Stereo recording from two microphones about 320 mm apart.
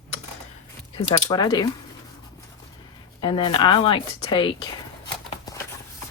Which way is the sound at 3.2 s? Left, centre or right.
Centre.